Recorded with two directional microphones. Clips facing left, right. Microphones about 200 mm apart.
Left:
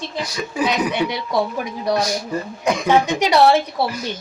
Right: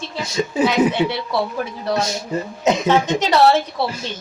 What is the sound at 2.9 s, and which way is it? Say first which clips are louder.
Speech: left 4 dB; 10° left (ahead or behind).